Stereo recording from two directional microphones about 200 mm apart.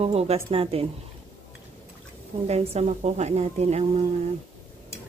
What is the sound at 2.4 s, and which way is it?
Speech, 30° right (ahead or behind).